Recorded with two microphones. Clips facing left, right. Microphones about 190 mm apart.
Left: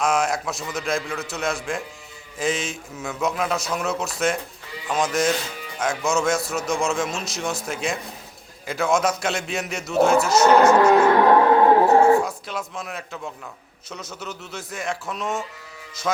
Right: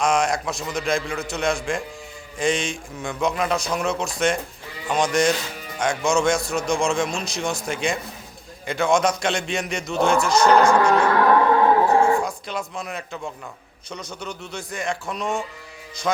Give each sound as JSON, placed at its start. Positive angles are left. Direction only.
{"t": 0.0, "sound": "a man's voice", "side_deg": 5}
{"t": 11.9, "sound": "dog", "side_deg": 5}
{"t": 12.2, "sound": "a man's voice", "side_deg": 0}